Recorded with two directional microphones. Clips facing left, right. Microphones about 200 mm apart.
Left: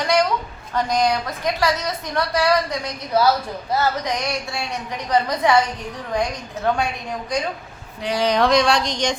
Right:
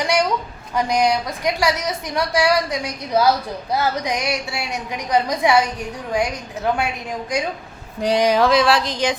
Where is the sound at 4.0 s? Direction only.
10° right (ahead or behind).